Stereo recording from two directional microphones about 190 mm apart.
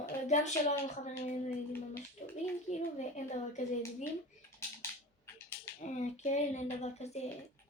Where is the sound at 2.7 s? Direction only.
35° left (ahead or behind).